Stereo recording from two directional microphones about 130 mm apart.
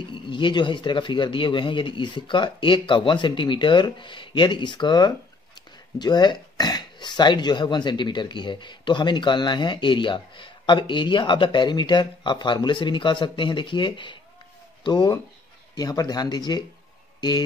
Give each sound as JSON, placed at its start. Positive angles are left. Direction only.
{"t": 0.1, "sound": "speech", "side_deg": 40}